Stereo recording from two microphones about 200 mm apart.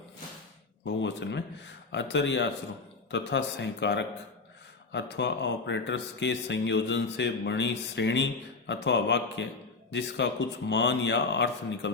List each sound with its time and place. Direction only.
0.9 s speech: 60° left (ahead or behind)